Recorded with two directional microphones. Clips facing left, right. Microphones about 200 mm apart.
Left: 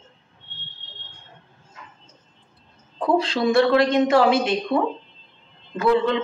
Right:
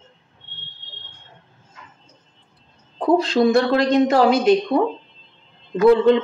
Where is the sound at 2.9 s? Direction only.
45° right (ahead or behind).